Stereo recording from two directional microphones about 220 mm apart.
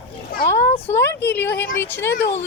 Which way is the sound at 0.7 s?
10° left (ahead or behind).